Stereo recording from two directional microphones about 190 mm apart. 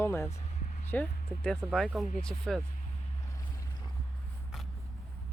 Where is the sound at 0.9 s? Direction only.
5° left (ahead or behind).